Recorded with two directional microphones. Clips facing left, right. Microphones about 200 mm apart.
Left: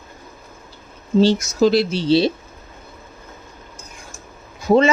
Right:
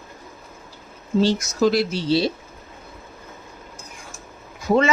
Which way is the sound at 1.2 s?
30° left (ahead or behind).